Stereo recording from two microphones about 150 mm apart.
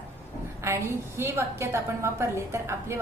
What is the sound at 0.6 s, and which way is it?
A woman's voice, 20° right (ahead or behind).